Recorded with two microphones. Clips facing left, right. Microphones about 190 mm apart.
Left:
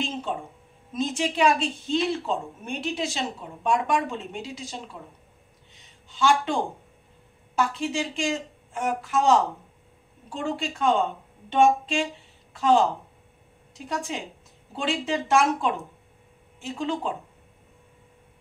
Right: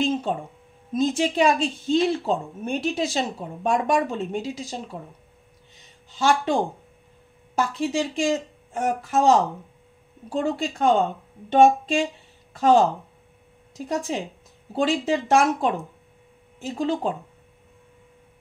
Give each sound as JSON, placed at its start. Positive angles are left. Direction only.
{"t": 0.9, "sound": "a woman's voice", "side_deg": -40}
{"t": 6.1, "sound": "a woman's voice", "side_deg": -40}
{"t": 7.5, "sound": "a woman's voice", "side_deg": -40}
{"t": 10.3, "sound": "a woman's voice", "side_deg": -40}